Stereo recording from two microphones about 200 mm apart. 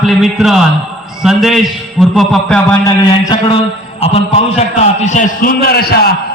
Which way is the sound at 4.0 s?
30° left (ahead or behind).